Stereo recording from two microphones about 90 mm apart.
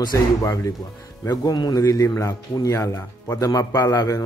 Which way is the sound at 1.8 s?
35° left (ahead or behind).